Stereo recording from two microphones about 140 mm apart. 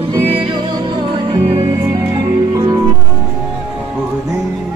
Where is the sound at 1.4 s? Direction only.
45° right (ahead or behind).